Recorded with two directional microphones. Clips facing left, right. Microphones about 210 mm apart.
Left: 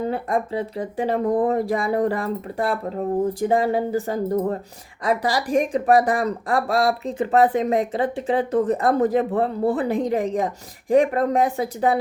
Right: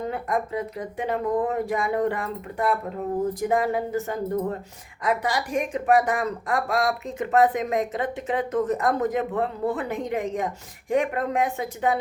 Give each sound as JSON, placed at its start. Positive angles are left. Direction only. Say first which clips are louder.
{"t": 0.1, "sound": "speech", "louder": "left 3 dB", "side_deg": 30}